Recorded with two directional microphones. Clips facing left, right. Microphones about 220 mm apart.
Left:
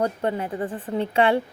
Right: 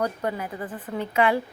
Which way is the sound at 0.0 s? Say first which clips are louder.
Left 3 dB; 25° left (ahead or behind).